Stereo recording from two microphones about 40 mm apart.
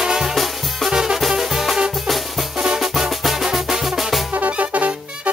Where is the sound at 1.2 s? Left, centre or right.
Centre.